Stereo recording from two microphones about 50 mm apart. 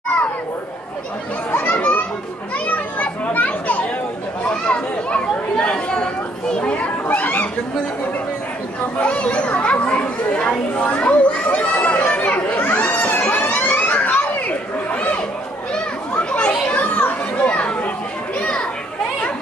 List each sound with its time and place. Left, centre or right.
1.5 s children playing: left
4.6 s chatter: left
6.6 s children playing: left
7.1 s chatter: left
9.0 s children playing: left
12.1 s chatter: left
13.3 s a sound: left
15.7 s children playing: left